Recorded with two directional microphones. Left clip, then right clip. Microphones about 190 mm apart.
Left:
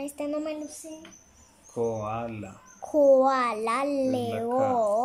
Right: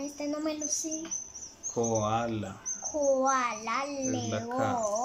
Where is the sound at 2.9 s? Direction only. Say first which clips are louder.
Left 7 dB; 25° left (ahead or behind).